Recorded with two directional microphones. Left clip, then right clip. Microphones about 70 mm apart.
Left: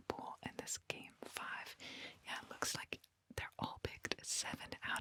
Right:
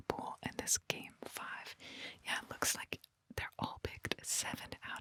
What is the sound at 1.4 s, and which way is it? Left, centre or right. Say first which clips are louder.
Whispering: even; centre.